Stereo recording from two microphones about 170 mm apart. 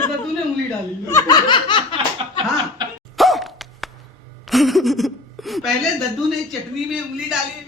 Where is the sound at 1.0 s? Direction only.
20° left (ahead or behind).